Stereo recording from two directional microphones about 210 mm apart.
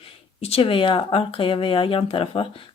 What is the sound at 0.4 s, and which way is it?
Speech, 25° left (ahead or behind).